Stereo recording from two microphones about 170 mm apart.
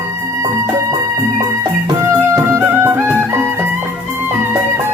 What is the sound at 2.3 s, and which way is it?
Music, 15° right (ahead or behind).